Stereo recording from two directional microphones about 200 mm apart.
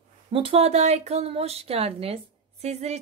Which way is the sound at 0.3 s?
30° right (ahead or behind).